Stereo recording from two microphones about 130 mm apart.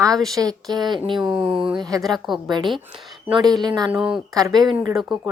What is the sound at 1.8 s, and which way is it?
Speech, 30° right (ahead or behind).